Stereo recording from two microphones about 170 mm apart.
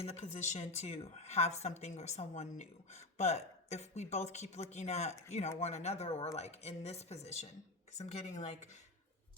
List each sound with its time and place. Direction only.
0.0 s speech: 40° left (ahead or behind)